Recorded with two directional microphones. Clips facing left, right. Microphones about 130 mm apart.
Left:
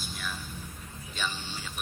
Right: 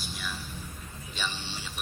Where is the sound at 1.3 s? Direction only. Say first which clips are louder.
Even; 45° left (ahead or behind).